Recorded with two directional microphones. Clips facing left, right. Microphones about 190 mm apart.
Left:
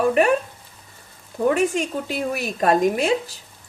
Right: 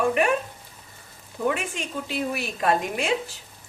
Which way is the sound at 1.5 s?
40° left (ahead or behind).